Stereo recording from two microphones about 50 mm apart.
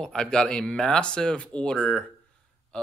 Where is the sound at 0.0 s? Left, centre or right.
Centre.